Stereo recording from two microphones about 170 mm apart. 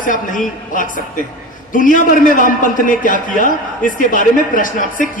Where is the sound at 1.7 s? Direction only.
55° left (ahead or behind).